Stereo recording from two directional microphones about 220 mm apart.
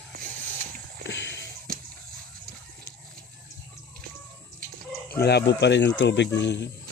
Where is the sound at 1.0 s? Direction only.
55° left (ahead or behind).